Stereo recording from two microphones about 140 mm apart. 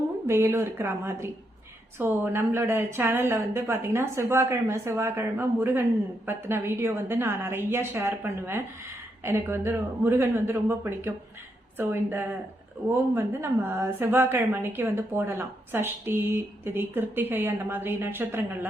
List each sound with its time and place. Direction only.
0.3 s a woman's voice: 20° right (ahead or behind)